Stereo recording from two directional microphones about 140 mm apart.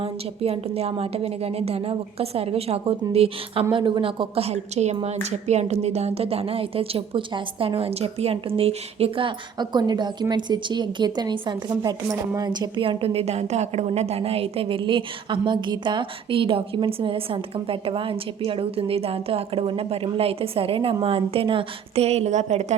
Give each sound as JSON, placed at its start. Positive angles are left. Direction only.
{"t": 0.0, "sound": "a woman's voice", "side_deg": -45}